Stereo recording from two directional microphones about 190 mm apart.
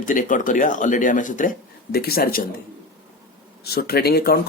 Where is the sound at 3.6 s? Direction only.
55° left (ahead or behind).